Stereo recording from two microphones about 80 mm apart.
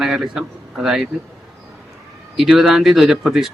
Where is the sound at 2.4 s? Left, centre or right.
Centre.